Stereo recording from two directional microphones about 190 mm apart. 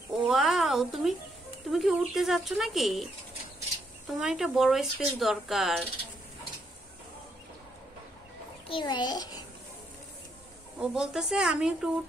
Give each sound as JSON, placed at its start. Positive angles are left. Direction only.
{"t": 0.1, "sound": "a sound", "side_deg": 0}
{"t": 1.7, "sound": "speech", "side_deg": 0}
{"t": 4.2, "sound": "speech", "side_deg": 0}
{"t": 8.6, "sound": "a child's voice", "side_deg": 25}
{"t": 10.8, "sound": "speech", "side_deg": -5}